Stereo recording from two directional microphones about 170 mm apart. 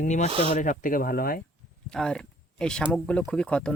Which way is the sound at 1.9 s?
5° left (ahead or behind).